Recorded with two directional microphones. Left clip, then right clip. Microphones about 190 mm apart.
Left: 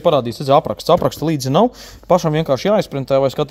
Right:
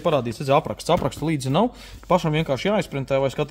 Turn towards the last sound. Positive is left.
turn(degrees=40)  # may be behind; listen again after turning